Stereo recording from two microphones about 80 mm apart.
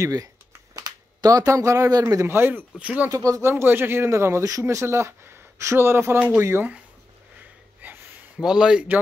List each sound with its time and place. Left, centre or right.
0.0 s speech: right
2.3 s speech: right
2.8 s a man's voice: centre
3.1 s speech: right
7.8 s a sound: right
8.4 s a man's voice: centre